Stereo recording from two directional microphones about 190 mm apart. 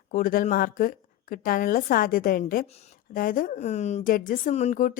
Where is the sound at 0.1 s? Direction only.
45° left (ahead or behind).